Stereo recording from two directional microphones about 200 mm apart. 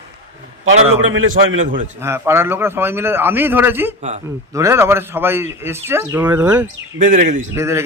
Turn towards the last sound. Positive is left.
turn(degrees=-15)  # may be behind; listen again after turning